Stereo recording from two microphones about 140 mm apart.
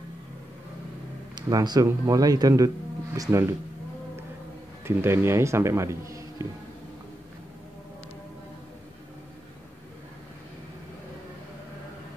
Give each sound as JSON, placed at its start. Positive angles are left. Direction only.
{"t": 1.3, "sound": "speech", "side_deg": -30}
{"t": 4.8, "sound": "speech", "side_deg": -15}